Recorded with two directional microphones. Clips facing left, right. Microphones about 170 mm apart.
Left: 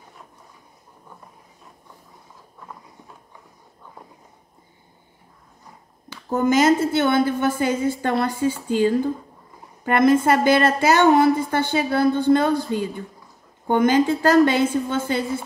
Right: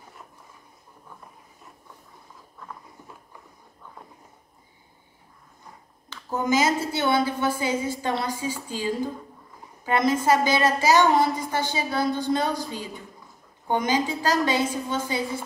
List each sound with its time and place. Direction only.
6.3 s a woman's voice: 55° left (ahead or behind)